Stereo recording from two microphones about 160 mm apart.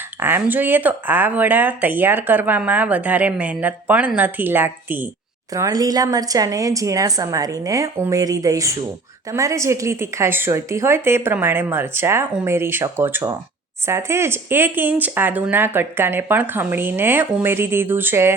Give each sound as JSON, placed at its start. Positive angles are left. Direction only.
{"t": 0.2, "sound": "a woman's voice", "side_deg": -15}